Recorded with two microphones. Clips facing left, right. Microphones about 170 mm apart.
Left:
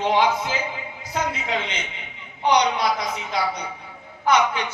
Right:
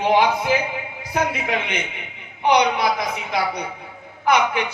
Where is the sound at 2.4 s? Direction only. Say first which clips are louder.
Right 2 dB; 60° right (ahead or behind).